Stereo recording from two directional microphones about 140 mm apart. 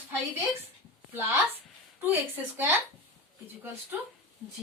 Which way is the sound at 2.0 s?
15° right (ahead or behind).